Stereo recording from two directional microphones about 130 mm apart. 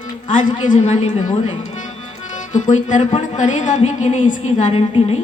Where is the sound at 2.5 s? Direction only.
70° left (ahead or behind).